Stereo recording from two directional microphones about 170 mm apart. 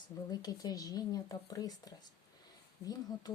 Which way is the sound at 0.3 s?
20° left (ahead or behind).